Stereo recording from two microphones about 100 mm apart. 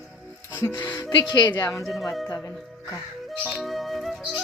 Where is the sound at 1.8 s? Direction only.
Centre (ahead or behind).